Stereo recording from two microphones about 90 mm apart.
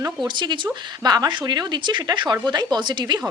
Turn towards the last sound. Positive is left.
turn(degrees=-55)  # may be behind; listen again after turning